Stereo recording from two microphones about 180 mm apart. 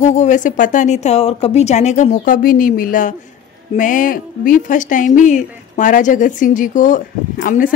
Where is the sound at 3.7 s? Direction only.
45° left (ahead or behind).